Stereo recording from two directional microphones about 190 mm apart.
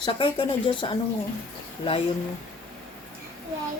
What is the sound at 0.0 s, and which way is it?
Speech, 25° left (ahead or behind).